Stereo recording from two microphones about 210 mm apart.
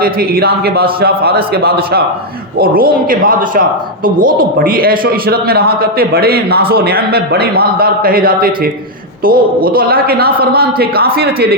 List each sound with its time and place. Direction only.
0.0 s a man's voice: 45° right (ahead or behind)